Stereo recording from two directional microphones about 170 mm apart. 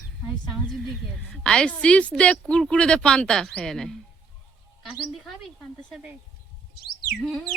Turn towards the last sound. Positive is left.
turn(degrees=0)  # may be behind; listen again after turning